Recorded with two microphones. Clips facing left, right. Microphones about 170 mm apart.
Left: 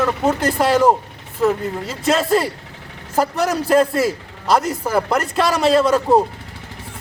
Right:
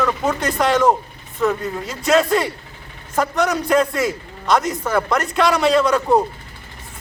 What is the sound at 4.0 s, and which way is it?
Speech, 5° left (ahead or behind).